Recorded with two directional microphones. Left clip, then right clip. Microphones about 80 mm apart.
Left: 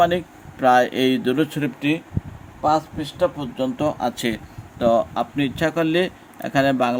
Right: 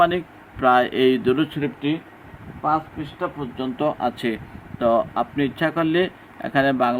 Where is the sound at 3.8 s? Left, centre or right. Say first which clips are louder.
Right 2 dB; left.